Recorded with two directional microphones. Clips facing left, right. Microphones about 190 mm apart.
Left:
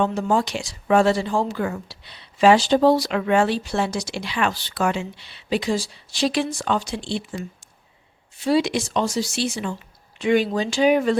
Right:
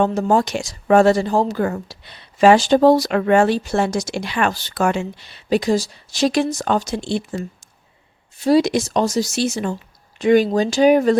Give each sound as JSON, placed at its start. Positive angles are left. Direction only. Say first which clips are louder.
{"t": 0.0, "sound": "speech", "louder": "right 4 dB", "side_deg": -45}
{"t": 8.4, "sound": "speech", "louder": "right 5 dB", "side_deg": -40}